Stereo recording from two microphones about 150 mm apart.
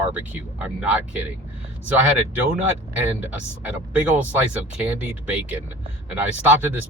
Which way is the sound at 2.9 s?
10° right (ahead or behind).